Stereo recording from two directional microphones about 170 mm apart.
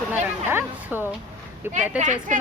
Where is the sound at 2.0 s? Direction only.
45° right (ahead or behind).